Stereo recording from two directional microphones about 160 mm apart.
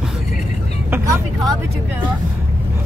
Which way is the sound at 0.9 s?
20° right (ahead or behind).